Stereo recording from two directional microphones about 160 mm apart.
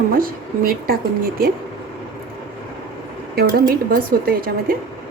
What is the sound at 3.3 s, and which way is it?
A woman's voice, 70° right (ahead or behind).